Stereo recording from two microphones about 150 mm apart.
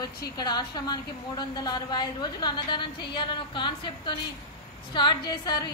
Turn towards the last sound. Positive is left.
turn(degrees=30)  # may be behind; listen again after turning